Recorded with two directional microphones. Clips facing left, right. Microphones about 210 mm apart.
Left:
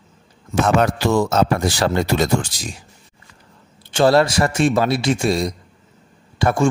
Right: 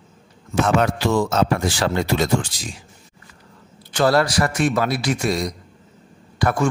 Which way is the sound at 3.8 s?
25° left (ahead or behind).